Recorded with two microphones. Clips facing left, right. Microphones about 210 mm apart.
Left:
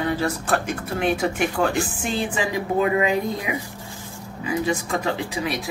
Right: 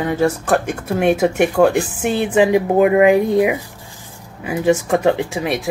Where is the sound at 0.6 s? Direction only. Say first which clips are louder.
Right 7 dB; 45° right (ahead or behind).